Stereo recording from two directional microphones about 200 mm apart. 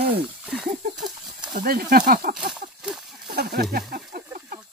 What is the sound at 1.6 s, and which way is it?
Speech, 45° right (ahead or behind).